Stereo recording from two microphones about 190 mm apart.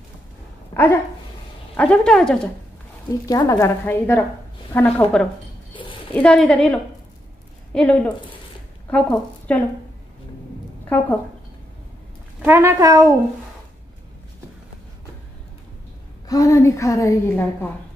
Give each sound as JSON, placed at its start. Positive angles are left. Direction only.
{"t": 1.8, "sound": "speech", "side_deg": 5}
{"t": 3.1, "sound": "a woman's voice", "side_deg": 20}
{"t": 5.7, "sound": "a sound", "side_deg": 25}
{"t": 6.1, "sound": "a woman's voice", "side_deg": 5}
{"t": 10.9, "sound": "a woman's voice", "side_deg": 10}
{"t": 12.4, "sound": "a woman's voice", "side_deg": -10}
{"t": 16.3, "sound": "a woman's voice", "side_deg": 15}